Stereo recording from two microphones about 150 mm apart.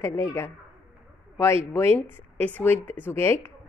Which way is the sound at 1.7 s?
15° left (ahead or behind).